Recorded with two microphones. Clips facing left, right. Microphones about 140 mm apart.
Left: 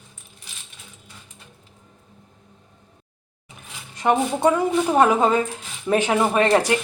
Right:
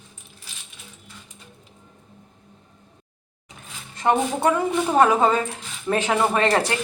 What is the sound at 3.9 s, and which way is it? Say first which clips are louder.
Speech: left 1 dB; 15° left (ahead or behind).